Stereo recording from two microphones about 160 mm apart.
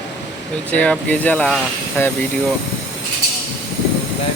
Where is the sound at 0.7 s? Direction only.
10° left (ahead or behind).